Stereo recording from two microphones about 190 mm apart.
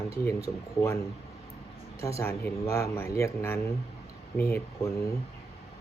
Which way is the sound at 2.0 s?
15° left (ahead or behind).